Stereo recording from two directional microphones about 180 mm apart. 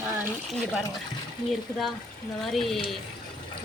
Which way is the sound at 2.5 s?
Centre (ahead or behind).